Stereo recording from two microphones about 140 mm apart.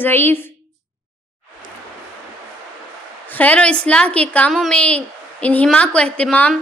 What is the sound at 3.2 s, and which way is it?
A woman's voice, 10° left (ahead or behind).